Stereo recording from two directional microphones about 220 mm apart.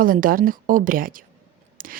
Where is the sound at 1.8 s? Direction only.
40° right (ahead or behind).